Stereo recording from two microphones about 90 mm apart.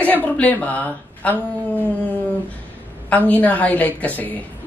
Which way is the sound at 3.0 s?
15° left (ahead or behind).